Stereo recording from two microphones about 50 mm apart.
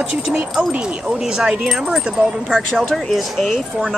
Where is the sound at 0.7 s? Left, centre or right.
Right.